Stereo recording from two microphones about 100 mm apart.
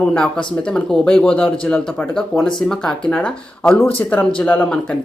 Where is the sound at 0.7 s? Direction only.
5° left (ahead or behind).